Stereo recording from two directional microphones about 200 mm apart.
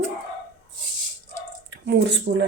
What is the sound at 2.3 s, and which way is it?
Speech, 55° right (ahead or behind).